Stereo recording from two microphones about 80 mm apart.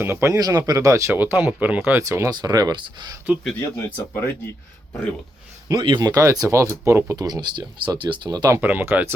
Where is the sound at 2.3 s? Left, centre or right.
Right.